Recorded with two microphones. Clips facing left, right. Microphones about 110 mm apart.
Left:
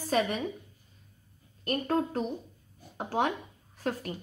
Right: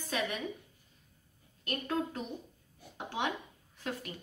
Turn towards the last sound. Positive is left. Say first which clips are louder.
# left 6 dB
turn(degrees=40)  # may be behind; listen again after turning